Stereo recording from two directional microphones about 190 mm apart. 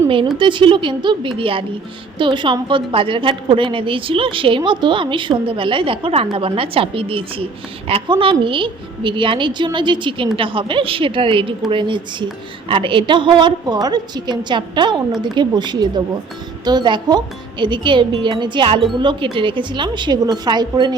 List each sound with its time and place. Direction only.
0.3 s a woman's voice: 25° right (ahead or behind)